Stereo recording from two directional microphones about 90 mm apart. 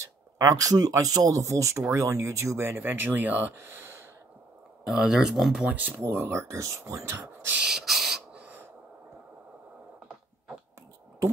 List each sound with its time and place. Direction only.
0.4 s speech: 40° right (ahead or behind)
4.8 s speech: 5° right (ahead or behind)
5.7 s speech: 20° right (ahead or behind)
7.6 s spray: 5° right (ahead or behind)